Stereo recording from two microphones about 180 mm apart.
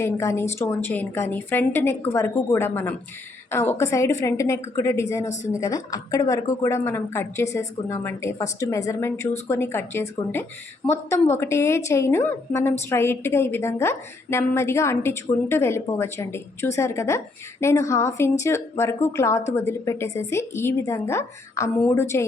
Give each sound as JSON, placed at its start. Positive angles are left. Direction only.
{"t": 0.0, "sound": "speech", "side_deg": 15}